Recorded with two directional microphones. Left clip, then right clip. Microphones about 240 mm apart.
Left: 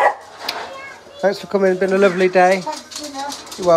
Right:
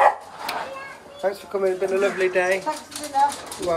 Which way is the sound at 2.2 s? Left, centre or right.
Left.